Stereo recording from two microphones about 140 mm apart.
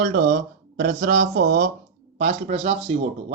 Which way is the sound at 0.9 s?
60° right (ahead or behind).